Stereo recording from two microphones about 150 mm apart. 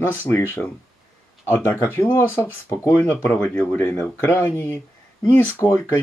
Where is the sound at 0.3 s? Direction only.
15° left (ahead or behind).